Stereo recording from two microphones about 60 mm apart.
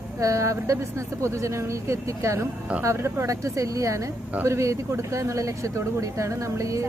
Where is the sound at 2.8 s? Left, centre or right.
Right.